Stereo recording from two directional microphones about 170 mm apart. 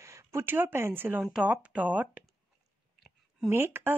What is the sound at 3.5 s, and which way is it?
Speech, 15° right (ahead or behind).